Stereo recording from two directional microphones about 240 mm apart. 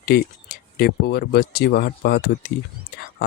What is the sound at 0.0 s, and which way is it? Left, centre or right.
Speech, left.